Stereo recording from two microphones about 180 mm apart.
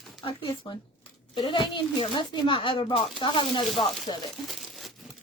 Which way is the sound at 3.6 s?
Centre (ahead or behind).